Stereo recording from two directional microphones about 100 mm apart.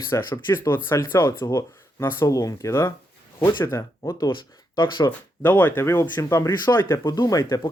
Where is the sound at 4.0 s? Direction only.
40° left (ahead or behind).